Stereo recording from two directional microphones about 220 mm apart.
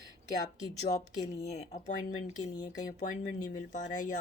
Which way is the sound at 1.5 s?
30° left (ahead or behind).